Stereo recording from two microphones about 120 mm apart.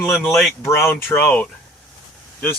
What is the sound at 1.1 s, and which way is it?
Speech, 15° left (ahead or behind).